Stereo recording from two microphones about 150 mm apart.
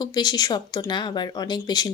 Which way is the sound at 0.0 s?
25° left (ahead or behind).